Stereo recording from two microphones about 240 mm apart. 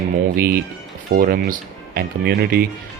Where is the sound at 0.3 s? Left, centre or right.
Right.